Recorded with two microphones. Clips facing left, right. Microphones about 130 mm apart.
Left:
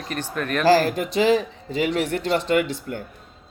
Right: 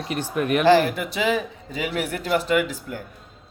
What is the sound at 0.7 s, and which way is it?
A man's voice, 35° left (ahead or behind).